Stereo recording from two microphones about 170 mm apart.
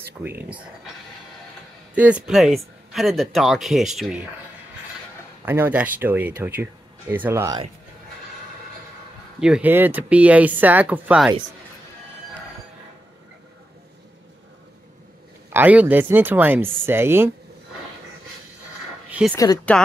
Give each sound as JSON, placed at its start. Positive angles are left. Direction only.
{"t": 0.2, "sound": "speech", "side_deg": -10}
{"t": 2.0, "sound": "speech", "side_deg": -5}
{"t": 5.4, "sound": "speech", "side_deg": -10}
{"t": 9.4, "sound": "speech", "side_deg": -5}
{"t": 15.5, "sound": "speech", "side_deg": -10}
{"t": 19.0, "sound": "a sound", "side_deg": -5}
{"t": 19.3, "sound": "speech", "side_deg": 20}